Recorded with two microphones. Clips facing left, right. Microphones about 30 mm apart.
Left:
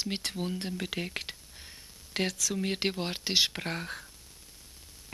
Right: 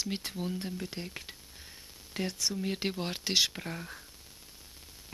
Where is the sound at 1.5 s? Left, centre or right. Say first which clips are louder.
Left 1 dB; centre.